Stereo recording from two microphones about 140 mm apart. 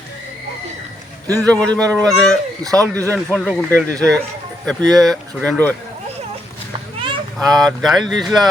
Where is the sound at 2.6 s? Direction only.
25° right (ahead or behind).